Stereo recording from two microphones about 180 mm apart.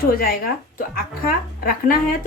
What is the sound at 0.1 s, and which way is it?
Speech, 55° left (ahead or behind).